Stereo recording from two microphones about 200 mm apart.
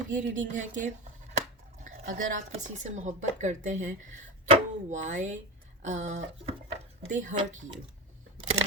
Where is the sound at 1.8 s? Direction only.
40° right (ahead or behind).